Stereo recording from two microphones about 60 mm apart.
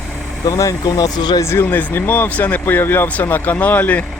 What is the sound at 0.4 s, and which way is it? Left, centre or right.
Speech, left.